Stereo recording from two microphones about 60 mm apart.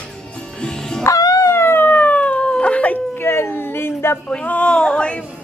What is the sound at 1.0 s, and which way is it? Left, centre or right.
Music, left.